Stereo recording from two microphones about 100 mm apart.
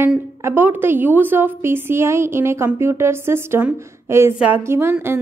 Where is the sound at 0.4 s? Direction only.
25° right (ahead or behind).